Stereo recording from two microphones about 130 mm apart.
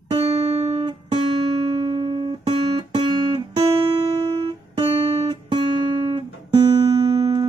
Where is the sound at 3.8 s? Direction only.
40° right (ahead or behind).